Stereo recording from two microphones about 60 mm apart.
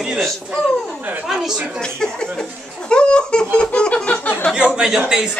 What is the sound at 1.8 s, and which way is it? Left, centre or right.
Speech, centre.